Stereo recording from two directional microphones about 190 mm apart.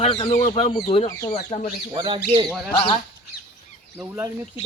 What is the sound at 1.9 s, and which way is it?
Speech, 25° right (ahead or behind).